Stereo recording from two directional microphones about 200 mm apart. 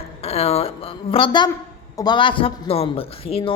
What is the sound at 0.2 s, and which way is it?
A woman's voice, 30° left (ahead or behind).